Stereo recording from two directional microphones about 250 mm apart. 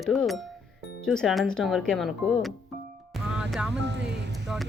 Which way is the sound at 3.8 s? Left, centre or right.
Right.